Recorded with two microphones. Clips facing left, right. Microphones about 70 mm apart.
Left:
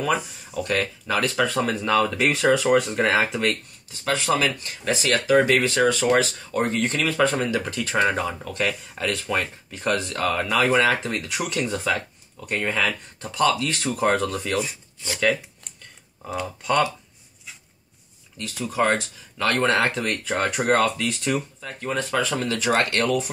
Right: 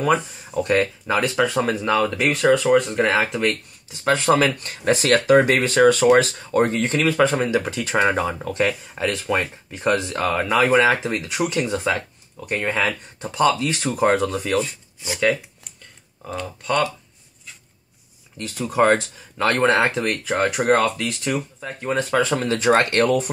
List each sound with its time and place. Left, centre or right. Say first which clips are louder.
0.7 s speech: right 5 dB; right
1.1 s speech: right 2 dB; centre
3.9 s speech: right 5 dB; right
4.6 s speech: right 5 dB; right
5.3 s speech: right 1 dB; right
7.1 s speech: right 4 dB; centre
13.2 s speech: right 3 dB; right
16.3 s speech: left 1 dB; centre
18.8 s speech: right 5 dB; right
19.8 s speech: right 3 dB; centre
21.5 s speech: right 4 dB; right